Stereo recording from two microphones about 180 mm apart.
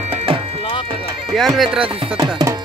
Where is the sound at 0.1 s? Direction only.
35° right (ahead or behind).